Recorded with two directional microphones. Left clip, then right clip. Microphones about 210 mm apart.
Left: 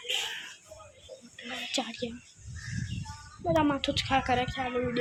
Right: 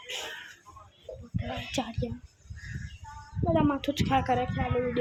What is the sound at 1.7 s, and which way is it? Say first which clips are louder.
Speech: left 1 dB; 10° right (ahead or behind).